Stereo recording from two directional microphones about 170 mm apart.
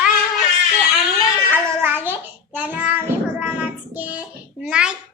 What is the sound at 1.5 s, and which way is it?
Babbling, 10° right (ahead or behind).